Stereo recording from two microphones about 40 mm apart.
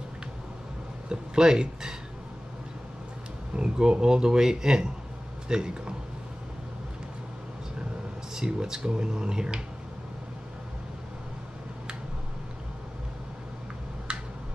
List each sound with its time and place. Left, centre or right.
1.0 s speech: centre
3.5 s speech: right
8.4 s speech: centre
14.1 s a sound: right